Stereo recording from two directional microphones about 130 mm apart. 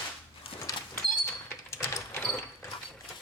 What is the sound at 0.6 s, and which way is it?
Sliding door, 20° left (ahead or behind).